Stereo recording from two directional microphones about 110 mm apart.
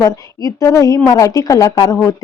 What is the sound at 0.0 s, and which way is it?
Speech, 30° left (ahead or behind).